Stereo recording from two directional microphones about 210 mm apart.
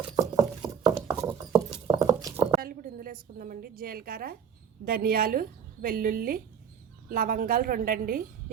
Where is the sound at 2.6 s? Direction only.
45° right (ahead or behind).